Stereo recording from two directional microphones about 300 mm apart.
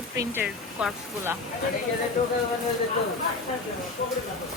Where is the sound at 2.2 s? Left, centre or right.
Left.